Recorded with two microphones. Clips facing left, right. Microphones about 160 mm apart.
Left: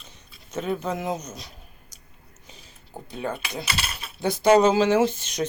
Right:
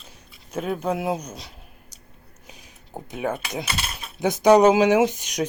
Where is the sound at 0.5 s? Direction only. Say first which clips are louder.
Right 2 dB; 10° right (ahead or behind).